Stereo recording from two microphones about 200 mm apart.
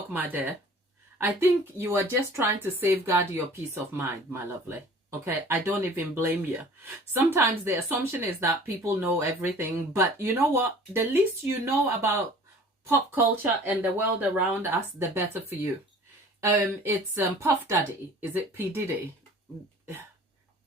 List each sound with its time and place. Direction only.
0.1 s speech: 10° right (ahead or behind)
16.4 s speech: 15° right (ahead or behind)